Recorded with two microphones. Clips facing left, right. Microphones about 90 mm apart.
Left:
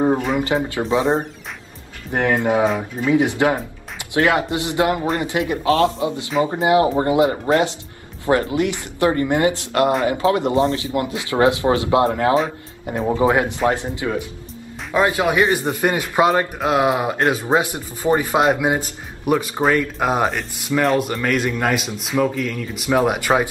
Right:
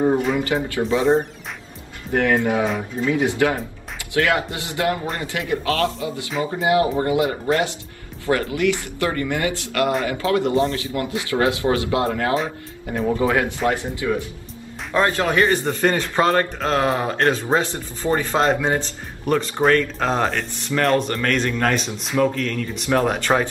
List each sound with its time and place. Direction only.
0.3 s speech: 20° left (ahead or behind)
0.8 s speech: 35° left (ahead or behind)
2.1 s speech: 20° left (ahead or behind)